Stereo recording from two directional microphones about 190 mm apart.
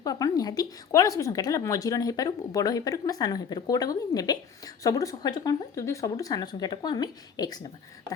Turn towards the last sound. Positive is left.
turn(degrees=20)  # may be behind; listen again after turning